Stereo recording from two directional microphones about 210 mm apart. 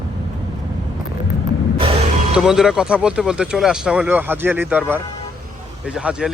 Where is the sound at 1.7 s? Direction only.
25° right (ahead or behind).